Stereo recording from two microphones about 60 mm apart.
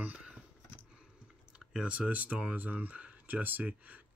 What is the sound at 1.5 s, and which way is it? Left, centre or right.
Speech, centre.